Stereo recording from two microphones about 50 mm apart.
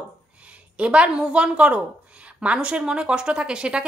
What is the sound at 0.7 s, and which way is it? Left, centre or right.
Speech, right.